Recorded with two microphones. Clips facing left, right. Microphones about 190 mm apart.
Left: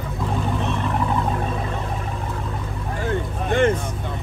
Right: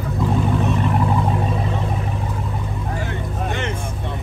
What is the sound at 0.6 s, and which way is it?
Vehicle, 15° right (ahead or behind).